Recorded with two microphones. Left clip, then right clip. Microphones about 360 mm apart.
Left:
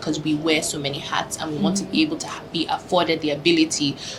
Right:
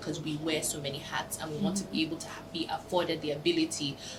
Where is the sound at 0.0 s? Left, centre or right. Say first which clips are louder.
Left 12 dB; left.